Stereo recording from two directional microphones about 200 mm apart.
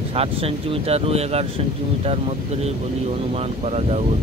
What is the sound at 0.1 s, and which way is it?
Speech, 30° right (ahead or behind).